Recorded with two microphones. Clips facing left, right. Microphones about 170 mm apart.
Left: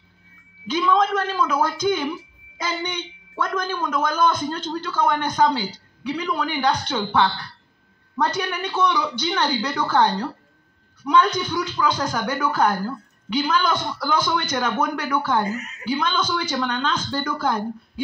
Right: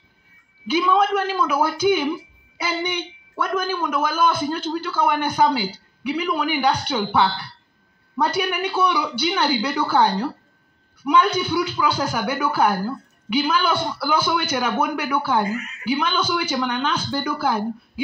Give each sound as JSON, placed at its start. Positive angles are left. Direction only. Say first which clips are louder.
{"t": 0.7, "sound": "speech", "louder": "right 1 dB", "side_deg": -10}
{"t": 15.5, "sound": "a woman's voice", "louder": "right 2 dB", "side_deg": 40}
{"t": 15.9, "sound": "speech", "louder": "right 1 dB", "side_deg": -10}